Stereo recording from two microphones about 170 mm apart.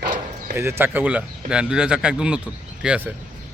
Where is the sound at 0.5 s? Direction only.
15° right (ahead or behind).